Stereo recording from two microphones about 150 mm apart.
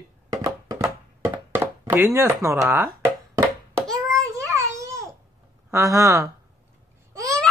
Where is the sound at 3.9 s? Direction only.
20° right (ahead or behind).